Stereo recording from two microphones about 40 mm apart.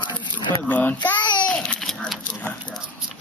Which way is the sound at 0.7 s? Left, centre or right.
Left.